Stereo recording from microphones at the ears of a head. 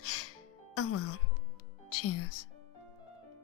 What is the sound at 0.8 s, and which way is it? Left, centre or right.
Speech, left.